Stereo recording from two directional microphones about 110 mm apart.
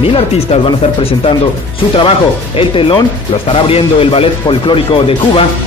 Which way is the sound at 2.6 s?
55° left (ahead or behind).